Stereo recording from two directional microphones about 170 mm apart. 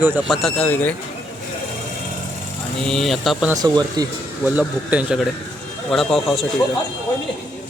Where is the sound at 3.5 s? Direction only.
25° right (ahead or behind).